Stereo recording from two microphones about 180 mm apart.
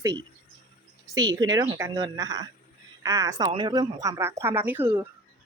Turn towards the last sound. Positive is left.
turn(degrees=-10)  # may be behind; listen again after turning